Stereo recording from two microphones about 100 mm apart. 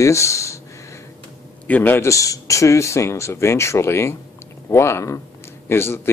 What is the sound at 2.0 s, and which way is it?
Speech, 35° left (ahead or behind).